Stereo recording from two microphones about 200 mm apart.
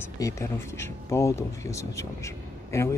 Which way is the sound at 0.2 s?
15° left (ahead or behind).